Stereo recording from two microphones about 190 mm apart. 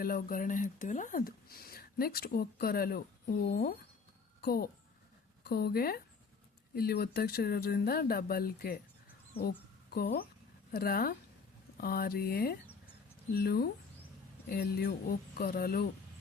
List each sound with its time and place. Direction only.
0.0 s a woman's voice: 50° left (ahead or behind)